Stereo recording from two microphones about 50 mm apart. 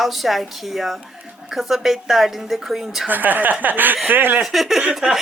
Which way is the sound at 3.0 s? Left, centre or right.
Right.